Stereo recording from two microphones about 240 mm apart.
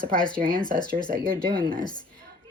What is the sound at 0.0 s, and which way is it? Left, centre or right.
Speech, right.